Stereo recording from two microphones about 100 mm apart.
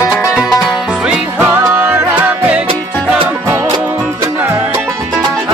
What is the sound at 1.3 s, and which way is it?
Music, 20° right (ahead or behind).